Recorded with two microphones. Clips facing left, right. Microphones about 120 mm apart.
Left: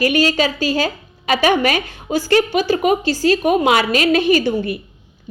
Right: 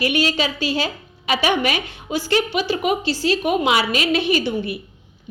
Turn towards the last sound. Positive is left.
turn(degrees=45)  # may be behind; listen again after turning